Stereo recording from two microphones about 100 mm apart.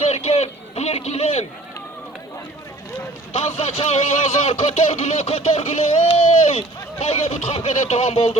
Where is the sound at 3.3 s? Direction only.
80° left.